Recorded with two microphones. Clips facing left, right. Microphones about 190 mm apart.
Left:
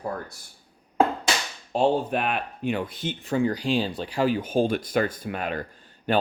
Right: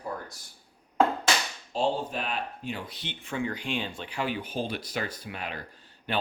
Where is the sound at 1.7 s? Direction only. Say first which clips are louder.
Left 6 dB; 60° left (ahead or behind).